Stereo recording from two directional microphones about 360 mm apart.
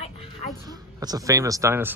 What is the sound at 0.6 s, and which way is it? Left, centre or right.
Speech, centre.